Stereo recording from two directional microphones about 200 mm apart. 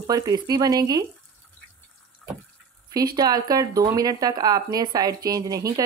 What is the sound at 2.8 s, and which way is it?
Speech, 20° right (ahead or behind).